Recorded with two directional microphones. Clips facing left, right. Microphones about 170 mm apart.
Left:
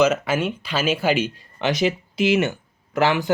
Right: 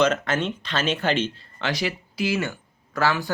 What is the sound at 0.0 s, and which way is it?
Speech, 10° left (ahead or behind).